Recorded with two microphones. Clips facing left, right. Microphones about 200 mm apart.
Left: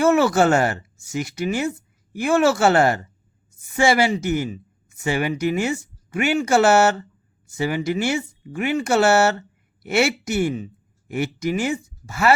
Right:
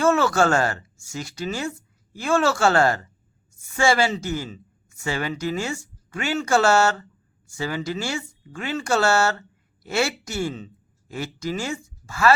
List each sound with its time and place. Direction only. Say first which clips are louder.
0.0 s speech: left 3 dB; 20° left (ahead or behind)